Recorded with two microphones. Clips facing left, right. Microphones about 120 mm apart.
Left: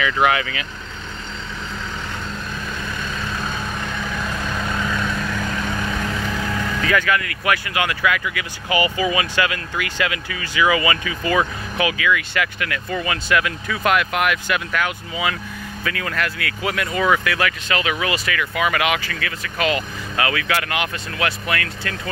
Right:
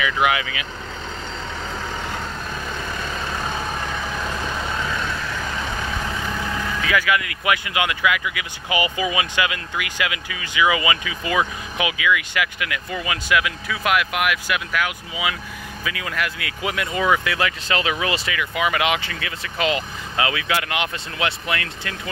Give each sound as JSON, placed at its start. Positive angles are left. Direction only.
{"t": 0.0, "sound": "speech", "side_deg": -15}
{"t": 6.8, "sound": "speech", "side_deg": -10}